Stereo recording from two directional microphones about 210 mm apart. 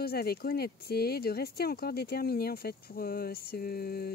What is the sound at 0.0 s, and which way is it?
Speech, 50° left (ahead or behind).